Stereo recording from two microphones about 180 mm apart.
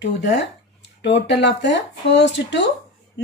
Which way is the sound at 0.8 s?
75° left (ahead or behind).